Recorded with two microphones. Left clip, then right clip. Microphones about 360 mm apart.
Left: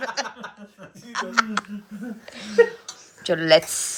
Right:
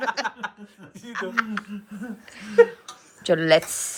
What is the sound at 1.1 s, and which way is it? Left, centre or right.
Speech, centre.